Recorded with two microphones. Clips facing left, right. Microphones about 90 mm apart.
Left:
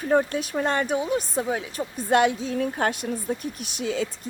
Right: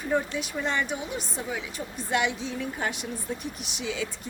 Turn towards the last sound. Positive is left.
turn(degrees=45)  # may be behind; listen again after turning